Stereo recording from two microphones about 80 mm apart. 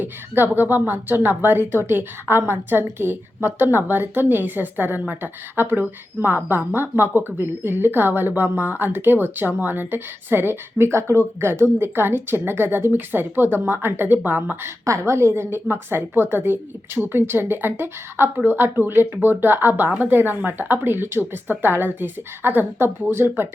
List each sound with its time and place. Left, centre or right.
0.0 s a woman's voice: right
14.8 s a woman's voice: right